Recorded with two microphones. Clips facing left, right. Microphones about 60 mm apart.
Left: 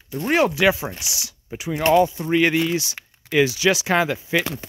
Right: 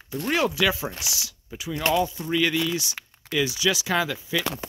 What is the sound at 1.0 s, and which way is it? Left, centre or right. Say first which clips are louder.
Speech: even; centre.